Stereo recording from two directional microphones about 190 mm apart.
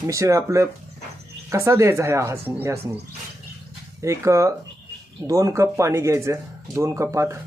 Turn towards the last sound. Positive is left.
turn(degrees=-15)  # may be behind; listen again after turning